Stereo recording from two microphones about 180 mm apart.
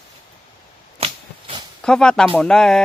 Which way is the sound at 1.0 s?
30° right (ahead or behind).